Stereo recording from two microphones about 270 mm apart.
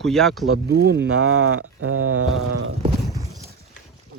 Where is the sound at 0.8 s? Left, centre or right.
Right.